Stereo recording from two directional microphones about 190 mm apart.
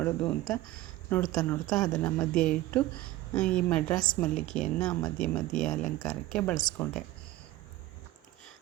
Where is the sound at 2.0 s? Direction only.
5° left (ahead or behind).